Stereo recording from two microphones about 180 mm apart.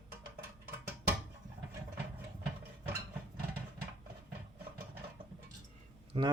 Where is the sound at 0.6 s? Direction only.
10° right (ahead or behind).